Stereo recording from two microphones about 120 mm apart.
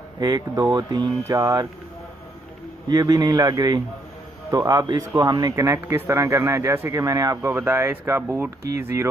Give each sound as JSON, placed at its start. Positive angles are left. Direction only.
{"t": 0.2, "sound": "a man's voice", "side_deg": -30}
{"t": 2.9, "sound": "a man's voice", "side_deg": -30}